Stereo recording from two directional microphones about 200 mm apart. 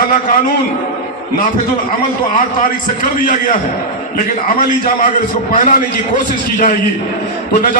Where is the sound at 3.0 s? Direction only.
40° left (ahead or behind).